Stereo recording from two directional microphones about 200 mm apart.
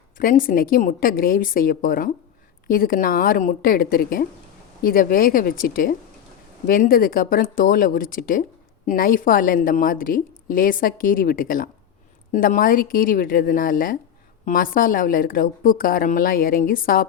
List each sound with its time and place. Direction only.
0.2 s a woman's voice: 45° left (ahead or behind)